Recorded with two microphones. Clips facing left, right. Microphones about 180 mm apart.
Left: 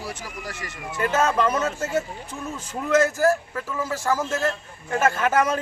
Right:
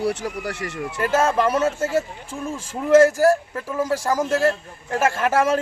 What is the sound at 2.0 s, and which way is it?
Speech, 30° right (ahead or behind).